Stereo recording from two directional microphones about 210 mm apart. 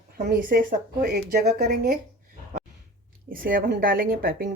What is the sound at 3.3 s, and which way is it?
Speech, 45° right (ahead or behind).